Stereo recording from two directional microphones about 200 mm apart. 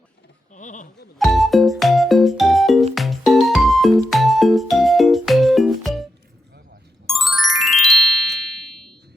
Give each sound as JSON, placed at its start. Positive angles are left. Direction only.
{"t": 0.5, "sound": "a sound", "side_deg": 40}
{"t": 1.2, "sound": "music", "side_deg": 0}
{"t": 7.1, "sound": "music", "side_deg": 0}